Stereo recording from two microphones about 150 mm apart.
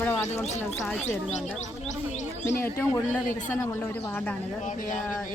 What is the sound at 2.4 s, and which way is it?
Speech, 15° left (ahead or behind).